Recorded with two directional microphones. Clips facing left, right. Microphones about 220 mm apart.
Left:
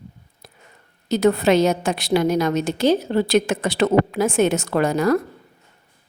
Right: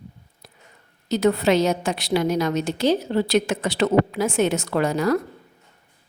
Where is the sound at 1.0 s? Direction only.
50° left (ahead or behind).